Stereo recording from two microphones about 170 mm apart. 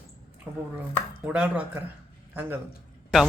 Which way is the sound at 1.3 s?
5° right (ahead or behind).